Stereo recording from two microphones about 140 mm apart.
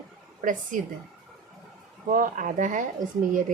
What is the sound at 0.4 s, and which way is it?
Speech, 65° right (ahead or behind).